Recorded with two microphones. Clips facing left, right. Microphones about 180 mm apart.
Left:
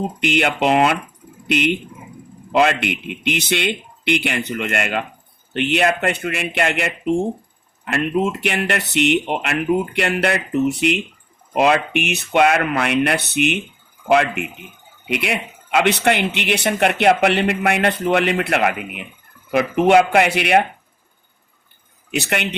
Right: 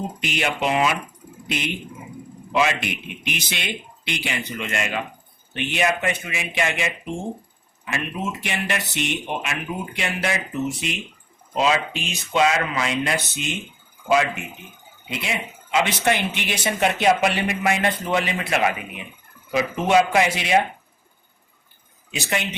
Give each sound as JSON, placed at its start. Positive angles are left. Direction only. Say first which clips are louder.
{"t": 0.2, "sound": "speech", "louder": "left 7 dB", "side_deg": 65}
{"t": 2.5, "sound": "speech", "louder": "left 5 dB", "side_deg": 65}
{"t": 22.1, "sound": "speech", "louder": "left 4 dB", "side_deg": 65}